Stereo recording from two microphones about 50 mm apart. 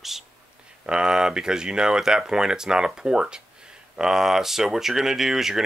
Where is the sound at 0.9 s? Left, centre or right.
Centre.